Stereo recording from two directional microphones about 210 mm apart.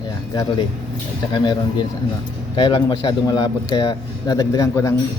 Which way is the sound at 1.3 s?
20° left (ahead or behind).